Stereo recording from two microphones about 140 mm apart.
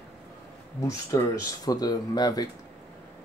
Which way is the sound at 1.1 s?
25° left (ahead or behind).